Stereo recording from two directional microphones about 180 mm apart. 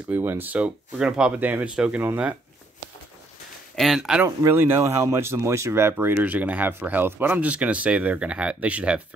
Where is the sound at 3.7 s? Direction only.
Centre (ahead or behind).